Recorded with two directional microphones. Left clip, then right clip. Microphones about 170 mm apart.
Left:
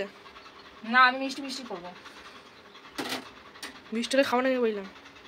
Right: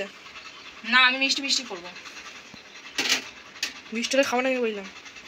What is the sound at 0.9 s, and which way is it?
Speech, 10° left (ahead or behind).